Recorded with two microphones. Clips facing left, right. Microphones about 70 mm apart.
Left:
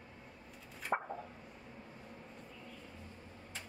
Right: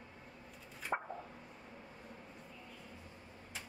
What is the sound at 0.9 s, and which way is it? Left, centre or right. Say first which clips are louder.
Plop: left 2 dB; centre.